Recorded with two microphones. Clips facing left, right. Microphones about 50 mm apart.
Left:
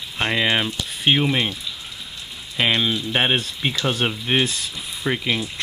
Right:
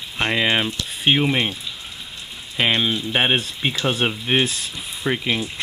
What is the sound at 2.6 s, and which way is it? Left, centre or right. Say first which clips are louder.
Speech: even; centre.